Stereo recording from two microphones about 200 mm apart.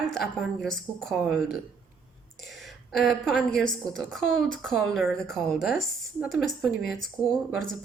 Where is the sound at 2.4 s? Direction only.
Centre (ahead or behind).